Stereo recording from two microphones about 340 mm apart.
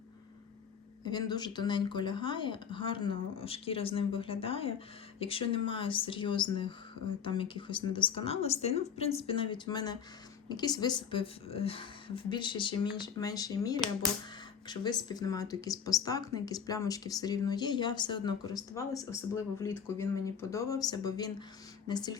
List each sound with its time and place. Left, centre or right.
1.0 s speech: centre